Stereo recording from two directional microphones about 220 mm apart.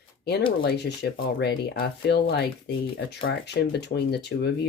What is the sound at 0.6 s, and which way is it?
Speech, 50° left (ahead or behind).